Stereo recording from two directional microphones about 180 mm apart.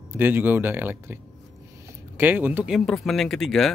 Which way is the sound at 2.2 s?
10° right (ahead or behind).